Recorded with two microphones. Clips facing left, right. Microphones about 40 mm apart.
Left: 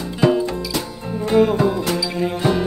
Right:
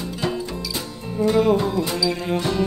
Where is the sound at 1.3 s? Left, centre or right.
Left.